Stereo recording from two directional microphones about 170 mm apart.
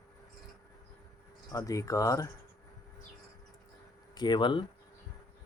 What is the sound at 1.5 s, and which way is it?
Speech, 20° left (ahead or behind).